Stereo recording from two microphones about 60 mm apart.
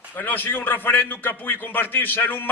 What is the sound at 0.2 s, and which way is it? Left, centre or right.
A man's voice, left.